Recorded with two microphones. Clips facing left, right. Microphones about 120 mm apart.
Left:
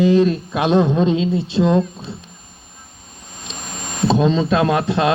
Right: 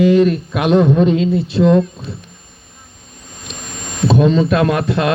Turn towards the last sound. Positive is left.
turn(degrees=20)  # may be behind; listen again after turning